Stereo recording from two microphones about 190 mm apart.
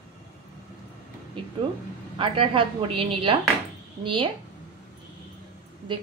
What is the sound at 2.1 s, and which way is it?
A woman's voice, 25° right (ahead or behind).